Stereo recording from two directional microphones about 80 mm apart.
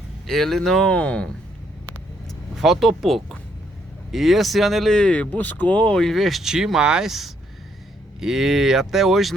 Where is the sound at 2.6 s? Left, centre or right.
Centre.